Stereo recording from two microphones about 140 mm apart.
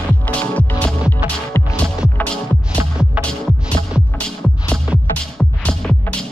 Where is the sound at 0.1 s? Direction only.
10° left (ahead or behind).